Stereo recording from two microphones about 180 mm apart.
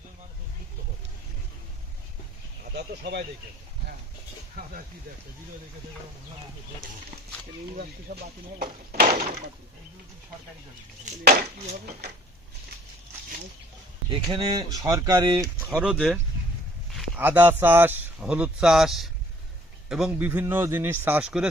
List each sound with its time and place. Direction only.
2.7 s speech: 70° right (ahead or behind)
7.8 s speech: 60° right (ahead or behind)
11.0 s speech: 45° right (ahead or behind)
14.3 s speech: 25° right (ahead or behind)
15.7 s speech: 5° right (ahead or behind)
17.2 s speech: 10° right (ahead or behind)